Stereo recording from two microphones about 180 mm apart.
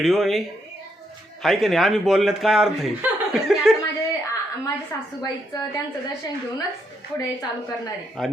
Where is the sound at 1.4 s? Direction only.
Centre (ahead or behind).